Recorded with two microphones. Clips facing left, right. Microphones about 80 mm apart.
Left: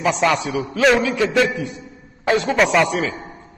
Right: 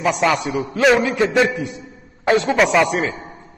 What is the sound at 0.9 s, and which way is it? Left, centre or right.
A man's voice, right.